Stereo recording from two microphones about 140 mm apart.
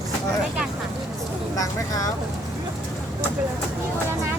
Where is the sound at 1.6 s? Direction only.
25° left (ahead or behind).